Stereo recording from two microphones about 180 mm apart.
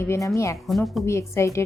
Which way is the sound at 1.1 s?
15° left (ahead or behind).